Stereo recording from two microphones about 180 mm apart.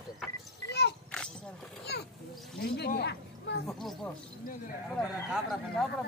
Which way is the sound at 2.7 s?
65° left (ahead or behind).